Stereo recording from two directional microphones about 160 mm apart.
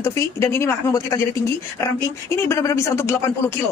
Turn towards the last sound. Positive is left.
turn(degrees=15)  # may be behind; listen again after turning